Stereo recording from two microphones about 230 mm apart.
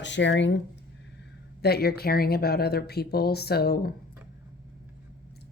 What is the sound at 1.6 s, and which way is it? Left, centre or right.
A woman's voice, left.